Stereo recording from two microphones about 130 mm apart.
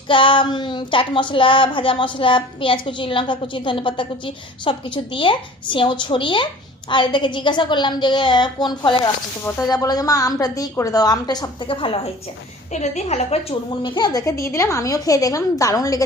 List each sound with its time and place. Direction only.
0.1 s a woman's voice: 40° left (ahead or behind)
11.7 s a woman's voice: 45° left (ahead or behind)
12.7 s a woman's voice: 60° left (ahead or behind)
13.9 s a woman's voice: 30° left (ahead or behind)